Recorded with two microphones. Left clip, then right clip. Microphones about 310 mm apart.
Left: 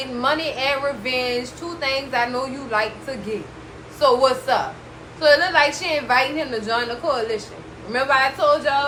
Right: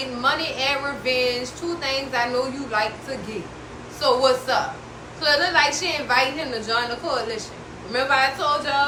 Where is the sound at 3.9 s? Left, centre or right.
Left.